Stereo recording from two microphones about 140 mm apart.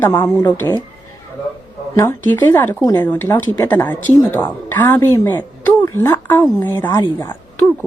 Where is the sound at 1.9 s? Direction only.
25° left (ahead or behind).